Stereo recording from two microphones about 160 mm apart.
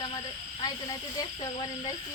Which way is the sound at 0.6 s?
25° left (ahead or behind).